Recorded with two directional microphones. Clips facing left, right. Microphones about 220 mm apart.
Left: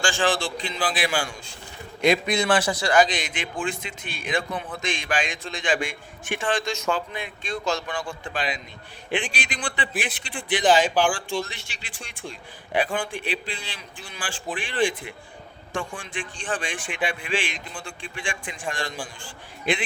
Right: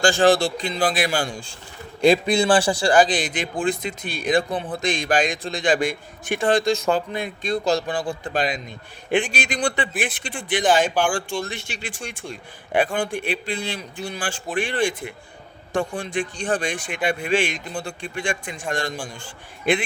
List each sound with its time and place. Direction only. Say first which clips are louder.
0.0 s a man's voice: right 7 dB; 40° right (ahead or behind)